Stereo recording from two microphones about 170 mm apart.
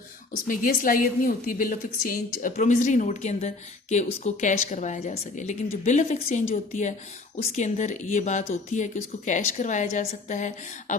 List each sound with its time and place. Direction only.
0.4 s a woman's voice: 55° left (ahead or behind)